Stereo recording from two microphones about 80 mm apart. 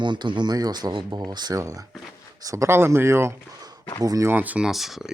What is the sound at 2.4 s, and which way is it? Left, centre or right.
Speech, right.